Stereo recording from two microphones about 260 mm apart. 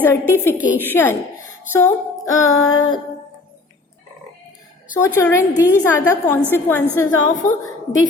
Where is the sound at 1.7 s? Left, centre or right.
Centre.